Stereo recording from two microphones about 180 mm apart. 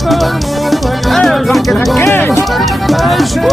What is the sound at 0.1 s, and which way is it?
Music, centre (ahead or behind).